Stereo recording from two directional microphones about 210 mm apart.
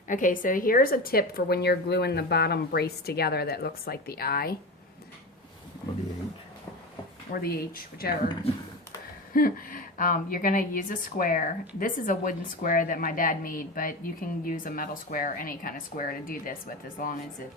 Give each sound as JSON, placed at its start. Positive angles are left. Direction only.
{"t": 0.1, "sound": "speech", "side_deg": 40}
{"t": 7.3, "sound": "speech", "side_deg": 45}
{"t": 9.3, "sound": "a woman's voice", "side_deg": 45}